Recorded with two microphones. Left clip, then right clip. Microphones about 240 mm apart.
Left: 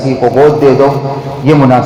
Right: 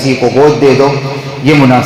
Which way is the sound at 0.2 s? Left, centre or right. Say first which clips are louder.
Left 2 dB; right.